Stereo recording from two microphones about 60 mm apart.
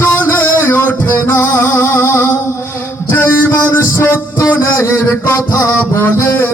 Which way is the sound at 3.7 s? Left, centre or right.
Left.